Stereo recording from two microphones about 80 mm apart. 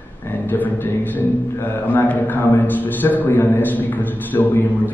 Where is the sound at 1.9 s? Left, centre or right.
Left.